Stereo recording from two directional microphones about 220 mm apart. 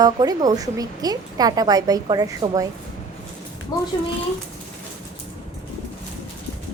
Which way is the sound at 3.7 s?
20° left (ahead or behind).